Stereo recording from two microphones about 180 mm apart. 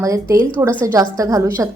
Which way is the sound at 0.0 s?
20° right (ahead or behind).